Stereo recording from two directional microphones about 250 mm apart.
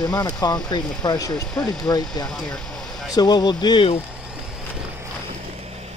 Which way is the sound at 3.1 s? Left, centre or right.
Centre.